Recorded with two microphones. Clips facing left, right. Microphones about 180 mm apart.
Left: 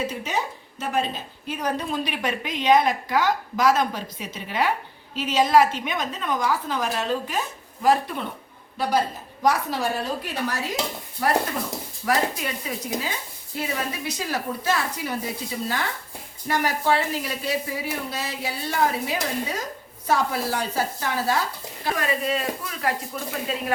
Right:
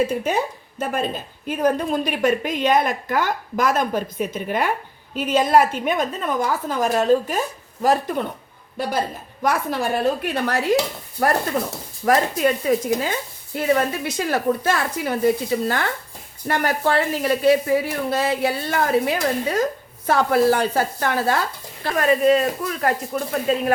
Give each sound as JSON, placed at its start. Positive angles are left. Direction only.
{"t": 0.8, "sound": "a woman's voice", "side_deg": -50}
{"t": 9.4, "sound": "speech", "side_deg": -55}
{"t": 11.2, "sound": "a woman's voice", "side_deg": -45}
{"t": 21.9, "sound": "a woman's voice", "side_deg": -45}